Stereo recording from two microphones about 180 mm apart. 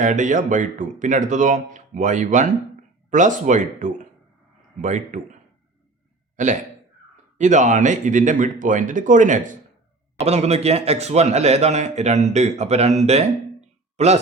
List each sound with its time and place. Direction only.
0.0 s a man's voice: 45° right (ahead or behind)